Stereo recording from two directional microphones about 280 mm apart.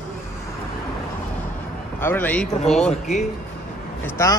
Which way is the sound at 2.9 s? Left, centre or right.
Left.